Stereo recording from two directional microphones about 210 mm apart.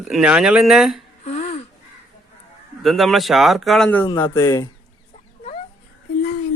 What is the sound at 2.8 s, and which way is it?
Speech, centre (ahead or behind).